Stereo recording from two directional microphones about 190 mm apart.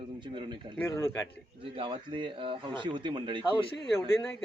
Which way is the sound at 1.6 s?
25° right (ahead or behind).